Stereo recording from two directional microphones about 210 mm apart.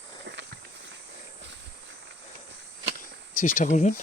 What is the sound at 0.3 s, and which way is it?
Walk, 60° right (ahead or behind).